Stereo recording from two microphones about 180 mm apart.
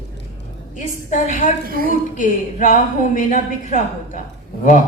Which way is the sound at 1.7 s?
55° right (ahead or behind).